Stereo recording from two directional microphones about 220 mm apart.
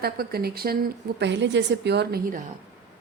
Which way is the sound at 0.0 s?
45° right (ahead or behind).